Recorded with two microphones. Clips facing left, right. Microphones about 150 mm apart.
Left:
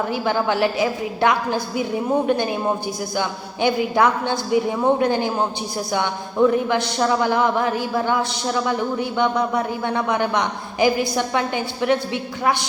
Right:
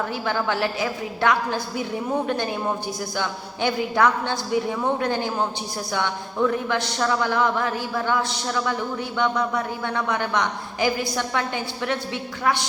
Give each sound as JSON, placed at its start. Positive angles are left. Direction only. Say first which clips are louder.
{"t": 0.1, "sound": "speech", "louder": "left 4 dB", "side_deg": 15}